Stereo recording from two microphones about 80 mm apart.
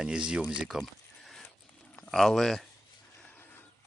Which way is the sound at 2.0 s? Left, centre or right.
Centre.